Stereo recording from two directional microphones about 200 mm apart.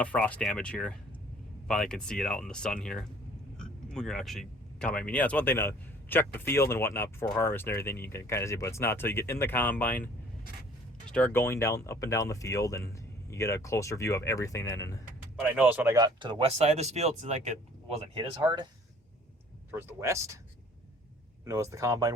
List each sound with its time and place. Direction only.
0.0 s speech: 5° left (ahead or behind)
15.4 s speech: 5° right (ahead or behind); by 18.3 s 30° right (ahead or behind)
19.7 s speech: 15° right (ahead or behind)
21.4 s speech: 15° right (ahead or behind)